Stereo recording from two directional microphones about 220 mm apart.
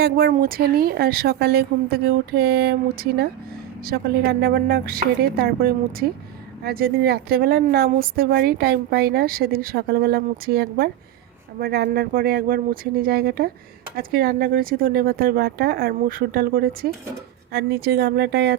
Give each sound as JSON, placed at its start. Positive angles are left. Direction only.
{"t": 0.0, "sound": "speech", "side_deg": -45}